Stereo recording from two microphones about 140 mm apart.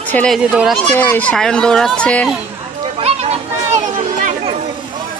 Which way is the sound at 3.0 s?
50° right (ahead or behind).